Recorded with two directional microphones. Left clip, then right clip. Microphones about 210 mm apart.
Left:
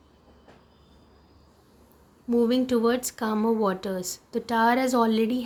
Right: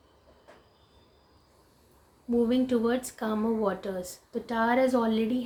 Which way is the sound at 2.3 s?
35° left (ahead or behind).